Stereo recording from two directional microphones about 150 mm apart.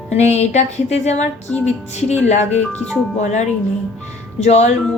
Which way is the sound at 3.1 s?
50° left (ahead or behind).